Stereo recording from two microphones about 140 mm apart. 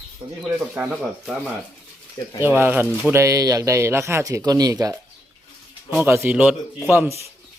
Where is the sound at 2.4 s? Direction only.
15° right (ahead or behind).